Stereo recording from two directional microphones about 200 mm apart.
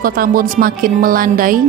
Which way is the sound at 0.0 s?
45° right (ahead or behind).